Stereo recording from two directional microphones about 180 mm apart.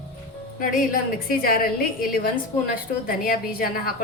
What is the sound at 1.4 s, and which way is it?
A woman's voice, 55° left (ahead or behind).